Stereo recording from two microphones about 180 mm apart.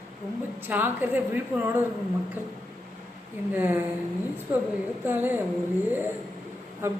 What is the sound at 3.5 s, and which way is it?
Speech, 10° right (ahead or behind).